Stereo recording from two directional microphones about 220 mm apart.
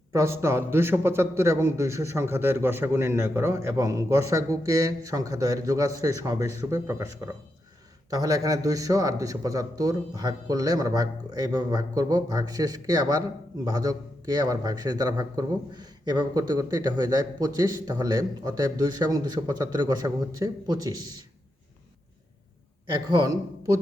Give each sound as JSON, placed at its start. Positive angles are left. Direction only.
{"t": 0.1, "sound": "a man's voice", "side_deg": -15}
{"t": 23.0, "sound": "a man's voice", "side_deg": -15}